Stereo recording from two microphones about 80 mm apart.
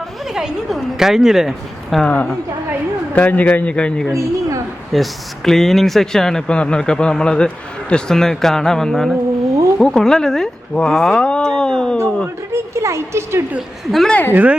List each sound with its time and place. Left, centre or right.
0.3 s a man's voice: centre
2.0 s a man's voice: centre
4.1 s a woman's voice: right
4.9 s a man's voice: centre
12.7 s a woman's voice: right
13.6 s a man's voice: centre
14.1 s speech: left